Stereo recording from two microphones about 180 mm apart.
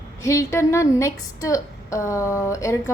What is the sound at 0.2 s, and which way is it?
A woman's voice, 15° left (ahead or behind).